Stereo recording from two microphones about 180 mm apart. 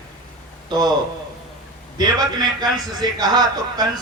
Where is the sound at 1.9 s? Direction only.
20° right (ahead or behind).